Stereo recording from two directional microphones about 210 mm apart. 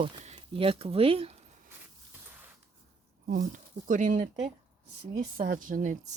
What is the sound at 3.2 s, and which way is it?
Speech, 40° right (ahead or behind).